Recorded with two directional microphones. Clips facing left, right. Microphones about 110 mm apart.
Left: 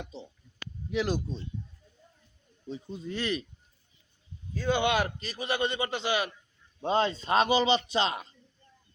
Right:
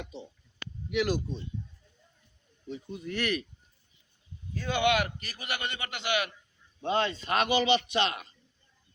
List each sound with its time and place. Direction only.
0.9 s a man's voice: 30° left (ahead or behind)
2.6 s a man's voice: 30° left (ahead or behind)
4.6 s a man's voice: 30° left (ahead or behind)